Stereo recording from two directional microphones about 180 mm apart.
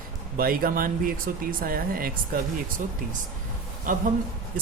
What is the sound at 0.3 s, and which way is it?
Speech, 55° right (ahead or behind).